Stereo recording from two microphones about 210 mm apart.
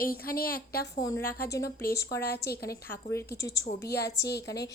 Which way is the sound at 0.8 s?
15° left (ahead or behind).